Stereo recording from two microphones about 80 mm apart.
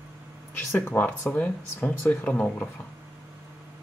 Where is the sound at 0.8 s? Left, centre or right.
Left.